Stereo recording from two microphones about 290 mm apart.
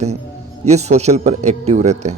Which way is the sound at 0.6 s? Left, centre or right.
Right.